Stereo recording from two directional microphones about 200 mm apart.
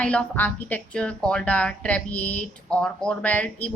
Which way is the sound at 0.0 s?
5° left (ahead or behind).